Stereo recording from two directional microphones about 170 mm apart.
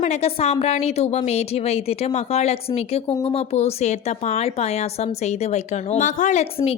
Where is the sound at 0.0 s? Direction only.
40° left (ahead or behind).